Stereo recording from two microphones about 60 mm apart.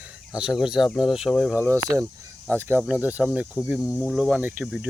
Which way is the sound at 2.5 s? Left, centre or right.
Right.